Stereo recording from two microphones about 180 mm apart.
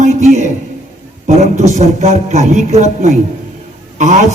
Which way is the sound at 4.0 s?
40° right (ahead or behind).